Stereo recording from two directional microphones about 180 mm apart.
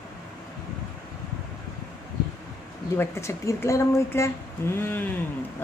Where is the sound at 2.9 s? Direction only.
15° left (ahead or behind).